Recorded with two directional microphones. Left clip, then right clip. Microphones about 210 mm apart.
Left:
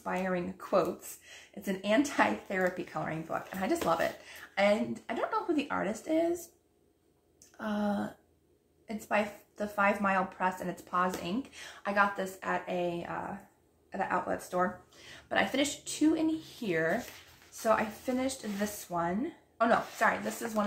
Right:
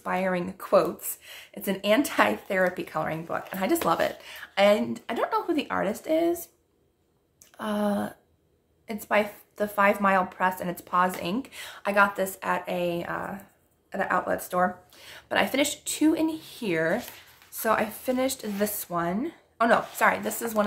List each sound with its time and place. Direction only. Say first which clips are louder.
0.0 s speech: right 6 dB; 45° right (ahead or behind)
7.5 s speech: right 6 dB; 40° right (ahead or behind)